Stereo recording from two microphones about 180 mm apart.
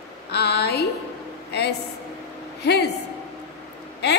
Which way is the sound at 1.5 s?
70° left (ahead or behind).